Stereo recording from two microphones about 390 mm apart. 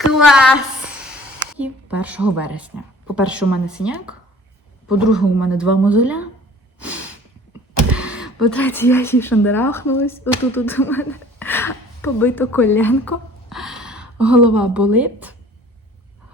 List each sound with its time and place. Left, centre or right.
0.3 s a woman's voice: centre
6.7 s snort: centre
7.9 s a woman's voice: centre